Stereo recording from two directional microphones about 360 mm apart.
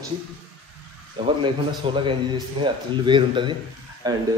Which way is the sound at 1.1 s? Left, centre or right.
Centre.